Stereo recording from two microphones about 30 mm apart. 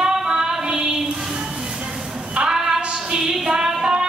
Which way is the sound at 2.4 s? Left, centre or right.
Centre.